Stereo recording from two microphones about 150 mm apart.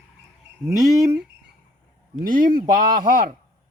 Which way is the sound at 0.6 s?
20° right (ahead or behind).